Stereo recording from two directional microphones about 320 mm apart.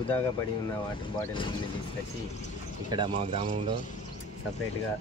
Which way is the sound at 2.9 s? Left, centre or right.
Centre.